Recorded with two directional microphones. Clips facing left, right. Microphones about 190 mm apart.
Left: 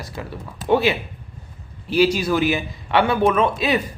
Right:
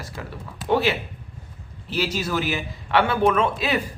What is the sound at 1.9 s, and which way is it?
A man's voice, 10° left (ahead or behind).